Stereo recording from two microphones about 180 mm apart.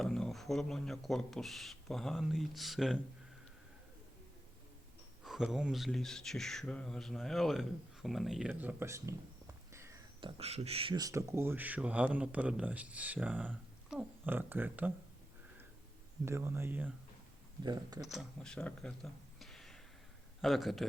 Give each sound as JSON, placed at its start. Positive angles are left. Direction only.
{"t": 0.0, "sound": "speech", "side_deg": 0}
{"t": 5.2, "sound": "speech", "side_deg": -5}
{"t": 9.7, "sound": "a sound", "side_deg": -15}
{"t": 10.2, "sound": "speech", "side_deg": -30}
{"t": 16.2, "sound": "speech", "side_deg": -15}
{"t": 17.6, "sound": "speech", "side_deg": -25}
{"t": 18.0, "sound": "speech", "side_deg": 0}